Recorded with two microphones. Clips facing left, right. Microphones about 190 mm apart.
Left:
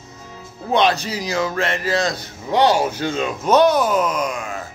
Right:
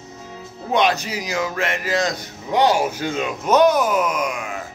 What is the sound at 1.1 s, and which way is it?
Speech, 15° right (ahead or behind).